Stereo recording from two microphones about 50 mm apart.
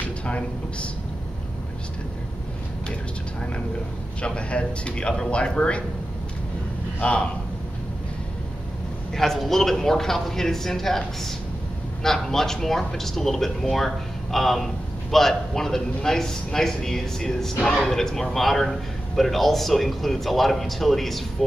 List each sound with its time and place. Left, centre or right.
0.2 s speech: left
4.2 s speech: left
7.0 s a man's voice: left
9.1 s a man's voice: centre